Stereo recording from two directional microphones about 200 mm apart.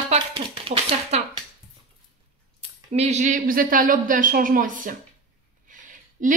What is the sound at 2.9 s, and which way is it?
Speech, 35° right (ahead or behind).